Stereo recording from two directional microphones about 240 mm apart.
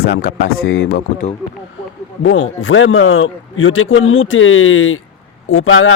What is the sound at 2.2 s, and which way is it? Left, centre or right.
A man's voice, left.